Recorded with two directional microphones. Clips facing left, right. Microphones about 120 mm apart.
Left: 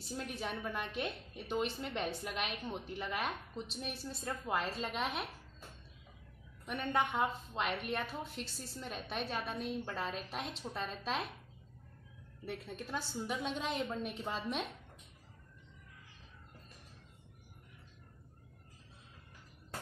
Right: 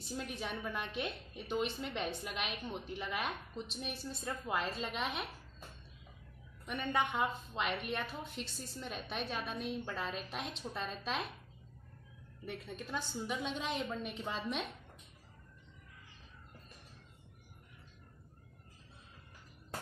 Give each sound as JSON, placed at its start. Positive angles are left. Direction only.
{"t": 0.2, "sound": "a woman's voice", "side_deg": 0}
{"t": 6.6, "sound": "a woman's voice", "side_deg": 5}
{"t": 12.4, "sound": "a woman's voice", "side_deg": 5}